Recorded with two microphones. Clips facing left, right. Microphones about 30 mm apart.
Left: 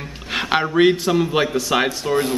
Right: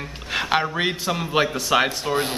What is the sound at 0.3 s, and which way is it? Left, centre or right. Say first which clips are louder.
Speech: left 2 dB; centre.